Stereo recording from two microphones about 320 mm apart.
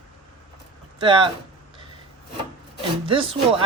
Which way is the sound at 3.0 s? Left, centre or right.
Centre.